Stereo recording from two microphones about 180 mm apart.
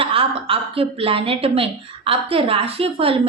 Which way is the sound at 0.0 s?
30° right (ahead or behind).